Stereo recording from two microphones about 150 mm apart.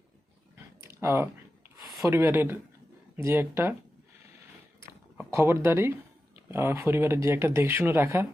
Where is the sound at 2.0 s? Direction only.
15° right (ahead or behind).